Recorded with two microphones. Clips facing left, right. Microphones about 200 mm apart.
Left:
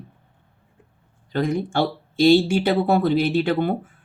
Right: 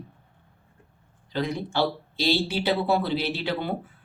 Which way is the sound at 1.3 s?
50° left (ahead or behind).